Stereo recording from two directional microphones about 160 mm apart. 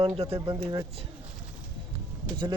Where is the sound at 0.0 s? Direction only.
35° right (ahead or behind).